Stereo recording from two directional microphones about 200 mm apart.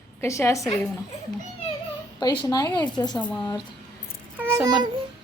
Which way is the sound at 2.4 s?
20° left (ahead or behind).